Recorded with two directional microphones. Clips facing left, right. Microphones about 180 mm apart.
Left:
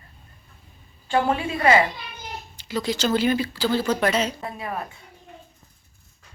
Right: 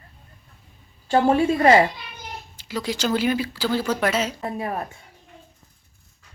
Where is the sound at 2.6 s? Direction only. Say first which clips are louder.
Left 1 dB; 10° right (ahead or behind).